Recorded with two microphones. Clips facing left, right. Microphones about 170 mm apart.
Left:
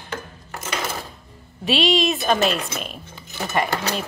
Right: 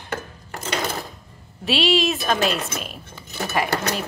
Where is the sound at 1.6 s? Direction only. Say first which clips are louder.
Left 1 dB; centre (ahead or behind).